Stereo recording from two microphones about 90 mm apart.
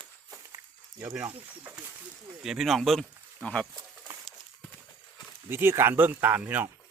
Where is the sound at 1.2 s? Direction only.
25° right (ahead or behind).